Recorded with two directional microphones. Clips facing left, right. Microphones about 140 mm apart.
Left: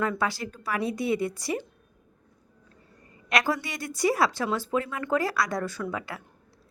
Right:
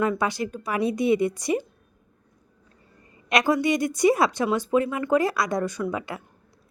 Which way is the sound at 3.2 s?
20° right (ahead or behind).